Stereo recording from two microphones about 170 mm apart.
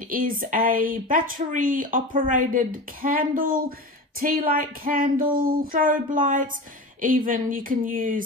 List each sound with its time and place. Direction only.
0.1 s speech: 55° right (ahead or behind)